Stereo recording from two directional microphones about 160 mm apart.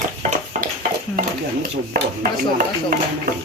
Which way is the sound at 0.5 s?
50° right (ahead or behind).